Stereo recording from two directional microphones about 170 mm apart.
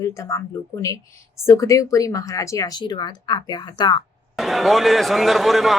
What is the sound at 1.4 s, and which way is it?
Speech, 20° left (ahead or behind).